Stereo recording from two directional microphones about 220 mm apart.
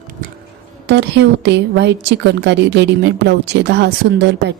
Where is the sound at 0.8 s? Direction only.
50° right (ahead or behind).